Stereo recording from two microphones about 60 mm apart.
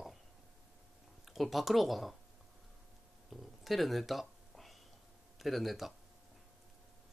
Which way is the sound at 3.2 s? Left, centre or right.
Centre.